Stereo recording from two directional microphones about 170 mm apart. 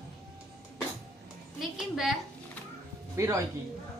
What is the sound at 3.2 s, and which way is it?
Speech, 15° right (ahead or behind).